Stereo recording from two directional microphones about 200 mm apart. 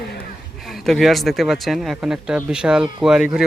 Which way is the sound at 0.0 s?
50° left (ahead or behind).